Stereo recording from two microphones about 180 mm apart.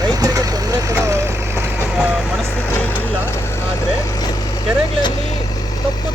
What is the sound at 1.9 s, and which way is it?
Speech, centre (ahead or behind).